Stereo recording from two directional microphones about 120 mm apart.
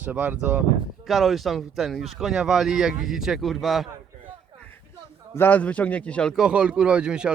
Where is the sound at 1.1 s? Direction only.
Centre (ahead or behind).